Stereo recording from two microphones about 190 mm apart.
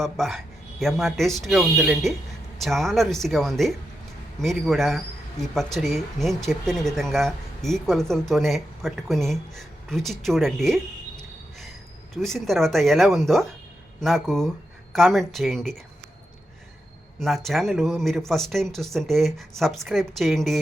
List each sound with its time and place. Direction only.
0.0 s speech: centre (ahead or behind)
12.1 s speech: centre (ahead or behind)
17.2 s speech: centre (ahead or behind)